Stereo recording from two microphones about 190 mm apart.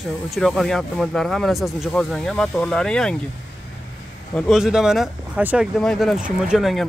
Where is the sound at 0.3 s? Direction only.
Centre (ahead or behind).